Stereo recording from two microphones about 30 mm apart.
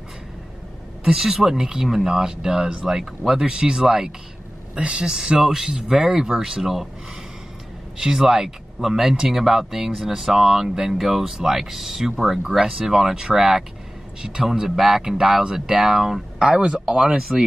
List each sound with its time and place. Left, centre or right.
1.2 s speech: centre
3.4 s speech: right
4.7 s speech: right; by 6.9 s centre
8.0 s speech: centre